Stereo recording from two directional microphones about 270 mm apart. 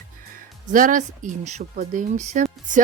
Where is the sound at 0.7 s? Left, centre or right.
Right.